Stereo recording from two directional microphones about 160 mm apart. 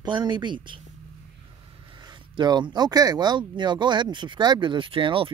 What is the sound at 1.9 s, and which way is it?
Speech, 30° right (ahead or behind).